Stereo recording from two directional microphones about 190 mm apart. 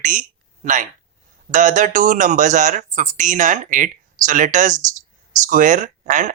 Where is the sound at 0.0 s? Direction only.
45° right (ahead or behind).